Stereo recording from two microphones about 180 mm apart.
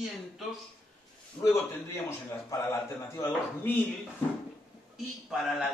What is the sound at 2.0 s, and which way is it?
A man's voice, 15° left (ahead or behind).